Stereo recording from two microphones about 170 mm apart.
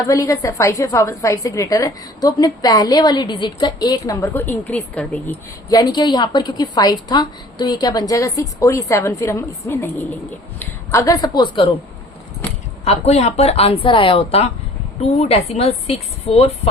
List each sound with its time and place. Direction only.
0.1 s a woman's voice: 20° left (ahead or behind)
5.6 s a woman's voice: 25° left (ahead or behind)
12.8 s a woman's voice: 40° left (ahead or behind)